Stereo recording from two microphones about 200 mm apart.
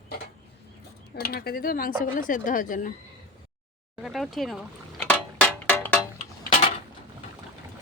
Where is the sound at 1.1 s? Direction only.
50° left (ahead or behind).